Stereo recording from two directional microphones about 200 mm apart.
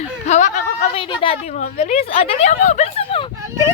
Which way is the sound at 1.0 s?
25° left (ahead or behind).